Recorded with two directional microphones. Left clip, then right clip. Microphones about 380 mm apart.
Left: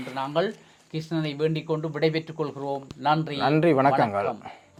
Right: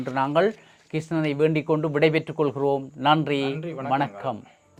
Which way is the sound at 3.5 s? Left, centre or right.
Left.